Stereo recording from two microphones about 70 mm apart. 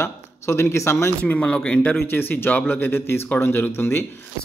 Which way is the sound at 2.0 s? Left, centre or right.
Left.